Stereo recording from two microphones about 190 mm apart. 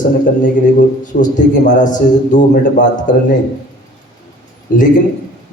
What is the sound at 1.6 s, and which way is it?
A man's voice, 40° left (ahead or behind).